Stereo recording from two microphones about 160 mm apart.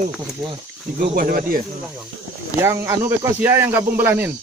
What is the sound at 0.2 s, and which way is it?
Speech, 25° right (ahead or behind).